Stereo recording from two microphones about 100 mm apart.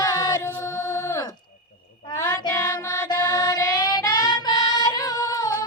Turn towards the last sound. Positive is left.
turn(degrees=40)  # may be behind; listen again after turning